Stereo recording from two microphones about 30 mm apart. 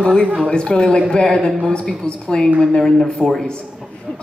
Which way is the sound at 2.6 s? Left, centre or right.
Centre.